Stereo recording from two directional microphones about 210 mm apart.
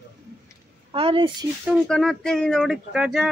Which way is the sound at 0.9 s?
25° right (ahead or behind).